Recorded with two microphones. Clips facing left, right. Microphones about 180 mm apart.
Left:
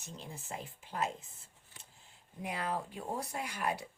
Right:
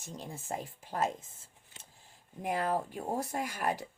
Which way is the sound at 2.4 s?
45° right (ahead or behind).